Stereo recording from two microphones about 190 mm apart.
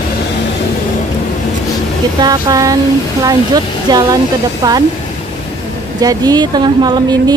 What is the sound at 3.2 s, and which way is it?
Speech, 20° right (ahead or behind).